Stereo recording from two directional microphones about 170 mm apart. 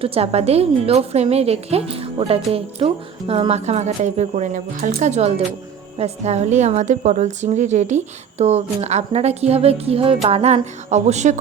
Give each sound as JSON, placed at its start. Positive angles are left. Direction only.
{"t": 0.0, "sound": "a woman's voice", "side_deg": -35}